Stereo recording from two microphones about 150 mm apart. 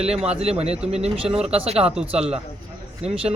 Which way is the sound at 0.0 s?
45° right (ahead or behind).